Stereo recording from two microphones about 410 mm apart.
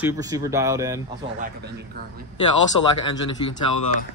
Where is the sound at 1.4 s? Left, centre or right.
Right.